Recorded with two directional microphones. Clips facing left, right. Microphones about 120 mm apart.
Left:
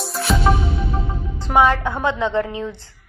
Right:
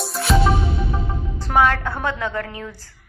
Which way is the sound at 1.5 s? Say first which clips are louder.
Left 2 dB; 15° left (ahead or behind).